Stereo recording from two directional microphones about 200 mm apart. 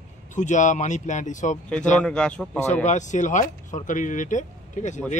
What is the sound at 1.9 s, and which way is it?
Speech, 5° left (ahead or behind).